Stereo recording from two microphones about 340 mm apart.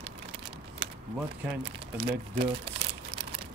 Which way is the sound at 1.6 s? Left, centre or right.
Centre.